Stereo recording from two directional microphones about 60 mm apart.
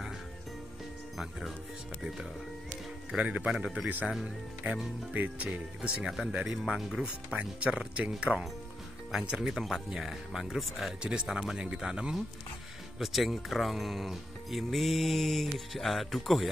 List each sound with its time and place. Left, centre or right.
1.1 s speech: centre
3.2 s speech: right
4.6 s music: right
6.0 s speech: centre
11.0 s speech: centre
13.0 s speech: centre